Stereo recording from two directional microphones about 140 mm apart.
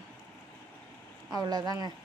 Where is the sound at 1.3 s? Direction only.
25° right (ahead or behind).